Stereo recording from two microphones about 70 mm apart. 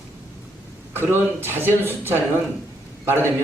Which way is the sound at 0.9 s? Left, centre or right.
Right.